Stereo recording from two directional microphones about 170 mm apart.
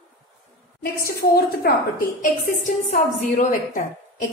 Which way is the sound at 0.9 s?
65° left (ahead or behind).